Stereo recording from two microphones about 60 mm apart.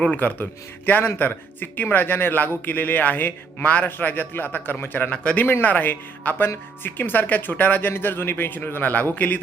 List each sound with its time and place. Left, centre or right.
0.1 s a man's voice: left
5.1 s speech: left
5.5 s a man's voice: left